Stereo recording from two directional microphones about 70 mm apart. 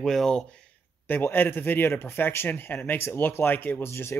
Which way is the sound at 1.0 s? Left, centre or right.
Left.